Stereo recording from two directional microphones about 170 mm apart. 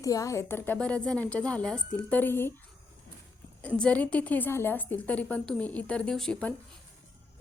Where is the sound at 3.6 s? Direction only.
5° left (ahead or behind).